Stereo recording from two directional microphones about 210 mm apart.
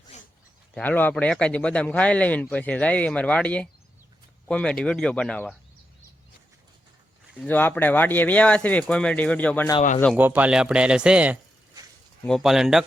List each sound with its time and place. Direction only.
0.1 s a sound: 30° left (ahead or behind)
0.7 s speech: 10° left (ahead or behind)
7.3 s speech: 10° left (ahead or behind)
10.2 s speech: 10° right (ahead or behind)